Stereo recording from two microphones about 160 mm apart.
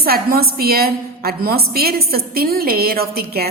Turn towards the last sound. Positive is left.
turn(degrees=-75)  # may be behind; listen again after turning